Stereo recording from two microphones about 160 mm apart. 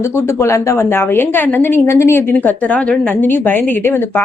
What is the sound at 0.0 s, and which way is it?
A woman's voice, 15° left (ahead or behind).